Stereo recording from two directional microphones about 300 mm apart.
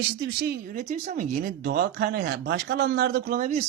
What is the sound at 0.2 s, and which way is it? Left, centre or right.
Speech, right.